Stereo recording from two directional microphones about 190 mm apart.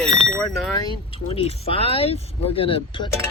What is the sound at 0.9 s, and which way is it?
Speech, 30° left (ahead or behind).